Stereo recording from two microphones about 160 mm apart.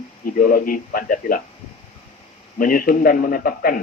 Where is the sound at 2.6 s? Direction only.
65° left (ahead or behind).